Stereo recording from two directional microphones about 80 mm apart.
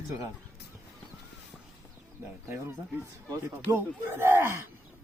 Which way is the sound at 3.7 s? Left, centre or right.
Right.